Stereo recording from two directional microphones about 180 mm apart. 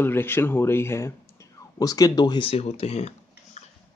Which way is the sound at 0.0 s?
10° left (ahead or behind).